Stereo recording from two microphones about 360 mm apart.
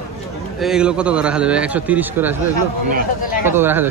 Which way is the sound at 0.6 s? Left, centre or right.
Centre.